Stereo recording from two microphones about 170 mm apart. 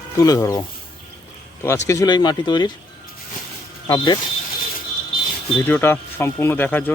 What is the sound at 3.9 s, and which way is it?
Speech, 25° left (ahead or behind).